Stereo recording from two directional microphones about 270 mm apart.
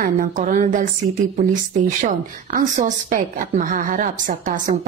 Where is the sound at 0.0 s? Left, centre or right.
Right.